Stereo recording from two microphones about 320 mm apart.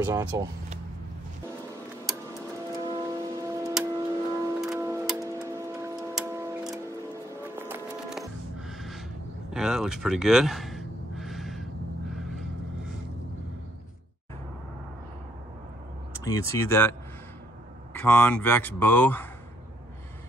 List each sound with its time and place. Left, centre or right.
0.0 s speech: centre
2.0 s tick-tock: centre
7.4 s music: centre
9.5 s gasp: centre
16.3 s speech: centre
17.9 s speech: centre